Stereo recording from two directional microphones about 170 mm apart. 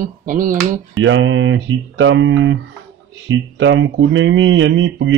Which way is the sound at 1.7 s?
90° right.